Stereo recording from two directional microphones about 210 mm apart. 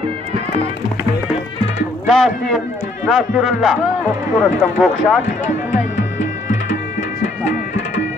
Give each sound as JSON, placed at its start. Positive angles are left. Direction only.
{"t": 2.0, "sound": "speech", "side_deg": 0}
{"t": 5.7, "sound": "music", "side_deg": 35}